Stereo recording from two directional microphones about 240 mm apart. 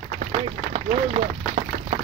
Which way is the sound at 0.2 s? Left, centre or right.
Right.